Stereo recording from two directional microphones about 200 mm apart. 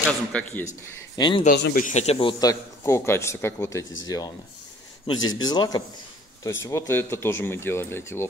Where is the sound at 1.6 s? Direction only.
55° left (ahead or behind).